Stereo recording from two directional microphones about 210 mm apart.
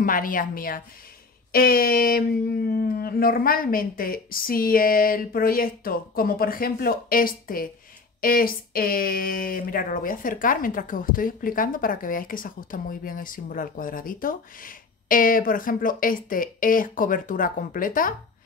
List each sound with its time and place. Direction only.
0.0 s speech: 40° left (ahead or behind)